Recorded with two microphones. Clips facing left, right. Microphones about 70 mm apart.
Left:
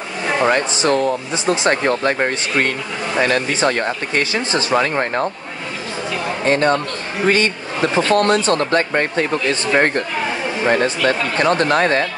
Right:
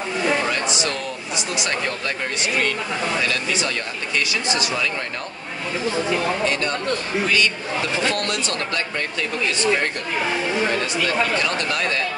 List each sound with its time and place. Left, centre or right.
0.5 s speech: left
6.4 s speech: left